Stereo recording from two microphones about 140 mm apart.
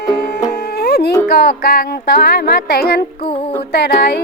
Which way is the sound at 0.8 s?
90° left.